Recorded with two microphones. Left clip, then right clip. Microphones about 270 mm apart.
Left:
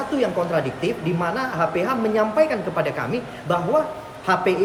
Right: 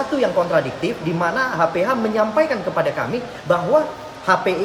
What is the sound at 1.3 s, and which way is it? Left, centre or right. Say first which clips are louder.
Speech: right 5 dB; centre.